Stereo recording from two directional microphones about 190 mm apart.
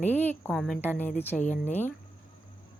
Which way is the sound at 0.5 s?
Centre (ahead or behind).